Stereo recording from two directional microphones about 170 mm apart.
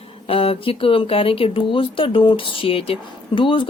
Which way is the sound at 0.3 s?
35° left (ahead or behind).